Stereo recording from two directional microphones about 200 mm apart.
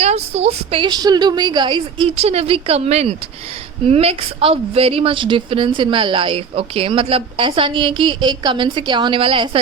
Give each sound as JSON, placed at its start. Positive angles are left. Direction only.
{"t": 0.0, "sound": "a woman's voice", "side_deg": -30}